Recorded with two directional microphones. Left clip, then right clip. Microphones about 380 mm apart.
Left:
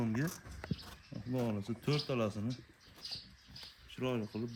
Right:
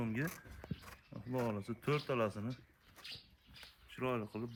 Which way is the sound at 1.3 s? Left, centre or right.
Centre.